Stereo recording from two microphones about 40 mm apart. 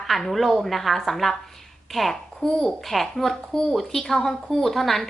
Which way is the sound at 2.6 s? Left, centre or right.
Centre.